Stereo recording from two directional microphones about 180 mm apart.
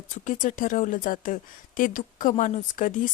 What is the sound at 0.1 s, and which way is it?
Speech, 45° left (ahead or behind).